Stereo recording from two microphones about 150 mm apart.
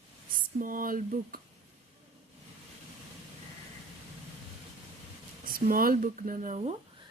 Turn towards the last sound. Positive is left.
turn(degrees=-60)  # may be behind; listen again after turning